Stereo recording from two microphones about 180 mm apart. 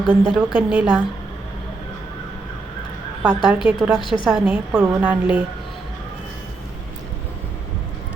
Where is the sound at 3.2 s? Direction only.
5° right (ahead or behind).